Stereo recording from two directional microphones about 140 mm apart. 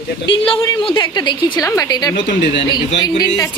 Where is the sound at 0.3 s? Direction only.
40° left (ahead or behind).